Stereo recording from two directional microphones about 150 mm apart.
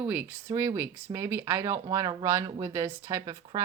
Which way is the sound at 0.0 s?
15° right (ahead or behind).